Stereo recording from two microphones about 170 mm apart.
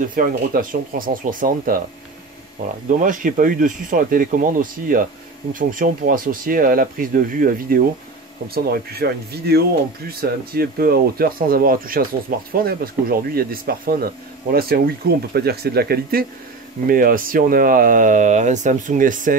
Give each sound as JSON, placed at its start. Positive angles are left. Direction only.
{"t": 0.1, "sound": "speech", "side_deg": -55}
{"t": 3.0, "sound": "speech", "side_deg": -50}